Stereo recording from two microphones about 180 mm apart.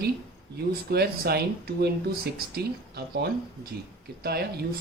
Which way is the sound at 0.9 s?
60° right (ahead or behind).